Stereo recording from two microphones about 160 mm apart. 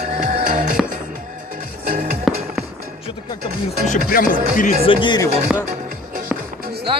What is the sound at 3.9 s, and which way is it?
Music, 60° left (ahead or behind).